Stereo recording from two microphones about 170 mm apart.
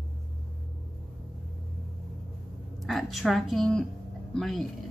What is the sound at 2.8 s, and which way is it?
A woman's voice, centre (ahead or behind).